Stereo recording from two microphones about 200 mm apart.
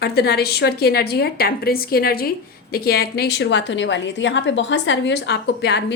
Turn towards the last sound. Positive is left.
turn(degrees=60)  # may be behind; listen again after turning